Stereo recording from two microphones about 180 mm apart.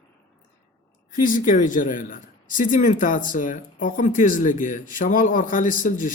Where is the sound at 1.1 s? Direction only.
50° left (ahead or behind).